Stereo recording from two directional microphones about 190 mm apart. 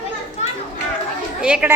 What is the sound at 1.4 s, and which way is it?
Speech, 5° right (ahead or behind).